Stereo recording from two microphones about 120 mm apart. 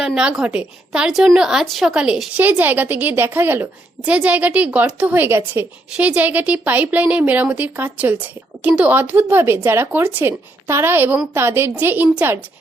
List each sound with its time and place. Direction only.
0.0 s a woman's voice: 5° right (ahead or behind)
2.4 s a woman's voice: 15° right (ahead or behind)